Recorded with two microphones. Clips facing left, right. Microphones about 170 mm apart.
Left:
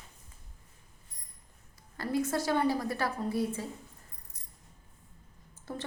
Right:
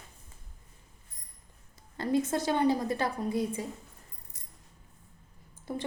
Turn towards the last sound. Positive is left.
turn(degrees=-15)  # may be behind; listen again after turning